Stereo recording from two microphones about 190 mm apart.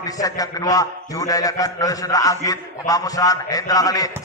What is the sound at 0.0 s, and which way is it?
A man's voice, 20° left (ahead or behind).